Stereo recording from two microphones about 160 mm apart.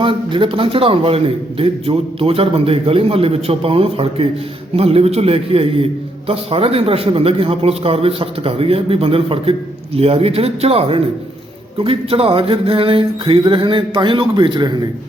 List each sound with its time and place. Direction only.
0.0 s a man's voice: 30° right (ahead or behind)